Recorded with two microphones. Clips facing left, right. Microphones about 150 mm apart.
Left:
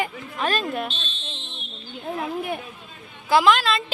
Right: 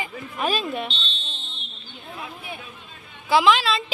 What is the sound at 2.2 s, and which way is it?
Speech, 50° left (ahead or behind).